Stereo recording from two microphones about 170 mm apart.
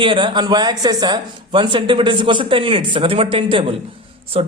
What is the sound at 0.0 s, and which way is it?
Speech, 30° right (ahead or behind).